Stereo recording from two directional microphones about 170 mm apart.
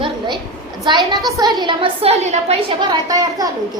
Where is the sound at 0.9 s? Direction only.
25° right (ahead or behind).